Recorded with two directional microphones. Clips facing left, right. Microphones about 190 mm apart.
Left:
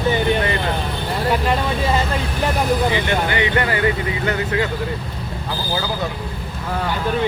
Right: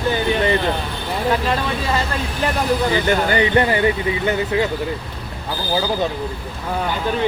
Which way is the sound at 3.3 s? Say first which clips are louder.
Right 6 dB; 35° right (ahead or behind).